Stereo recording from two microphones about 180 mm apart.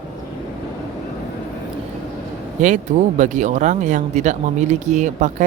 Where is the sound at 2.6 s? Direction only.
45° right (ahead or behind).